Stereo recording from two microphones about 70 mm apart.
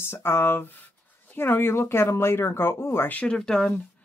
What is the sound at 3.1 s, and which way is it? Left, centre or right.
Speech, centre.